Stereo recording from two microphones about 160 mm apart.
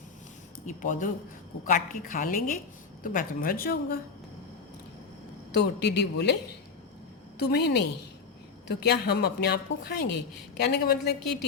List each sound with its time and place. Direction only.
0.6 s a woman's voice: 55° left (ahead or behind)
5.5 s a woman's voice: 90° left
7.3 s a woman's voice: 90° left